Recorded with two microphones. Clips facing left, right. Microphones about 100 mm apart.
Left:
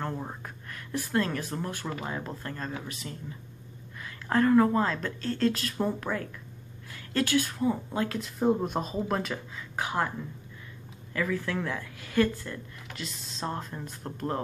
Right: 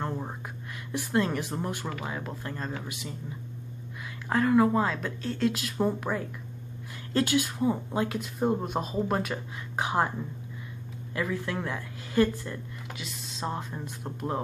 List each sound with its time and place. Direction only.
0.9 s speech: 15° right (ahead or behind)
2.0 s speech: 5° right (ahead or behind)
8.2 s speech: centre (ahead or behind)
9.8 s speech: 20° right (ahead or behind)
11.1 s speech: 20° right (ahead or behind)
12.9 s speech: 5° right (ahead or behind)